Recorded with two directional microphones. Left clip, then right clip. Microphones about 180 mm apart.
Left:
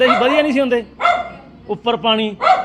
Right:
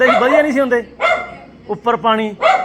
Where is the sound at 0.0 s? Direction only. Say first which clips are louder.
Right 2 dB; 10° left (ahead or behind).